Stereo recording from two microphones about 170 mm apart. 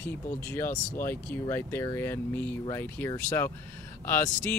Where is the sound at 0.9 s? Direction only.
15° left (ahead or behind).